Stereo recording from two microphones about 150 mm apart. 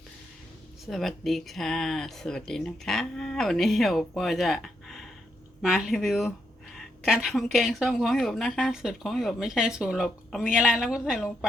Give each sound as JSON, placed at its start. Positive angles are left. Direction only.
{"t": 0.9, "sound": "speech", "side_deg": 0}
{"t": 6.7, "sound": "a sound", "side_deg": -5}
{"t": 7.5, "sound": "speech", "side_deg": 0}